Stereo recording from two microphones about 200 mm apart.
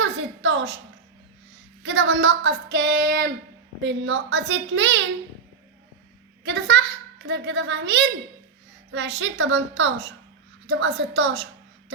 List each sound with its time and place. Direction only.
0.0 s a sound: 70° right (ahead or behind)
1.8 s a woman's voice: 70° right (ahead or behind)
6.4 s a woman's voice: 60° right (ahead or behind)
9.2 s a child's voice: 70° right (ahead or behind)